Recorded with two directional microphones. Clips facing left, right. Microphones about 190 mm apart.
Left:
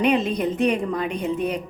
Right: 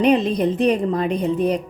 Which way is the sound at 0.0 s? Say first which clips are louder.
Right 4 dB; 35° right (ahead or behind).